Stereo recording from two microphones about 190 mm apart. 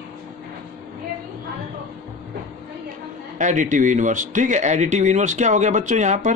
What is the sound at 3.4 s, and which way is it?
A man's voice, 40° right (ahead or behind).